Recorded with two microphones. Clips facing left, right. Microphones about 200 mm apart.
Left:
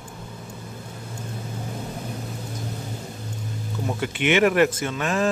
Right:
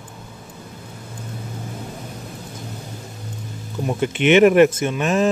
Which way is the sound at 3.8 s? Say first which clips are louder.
Right 6 dB; 20° right (ahead or behind).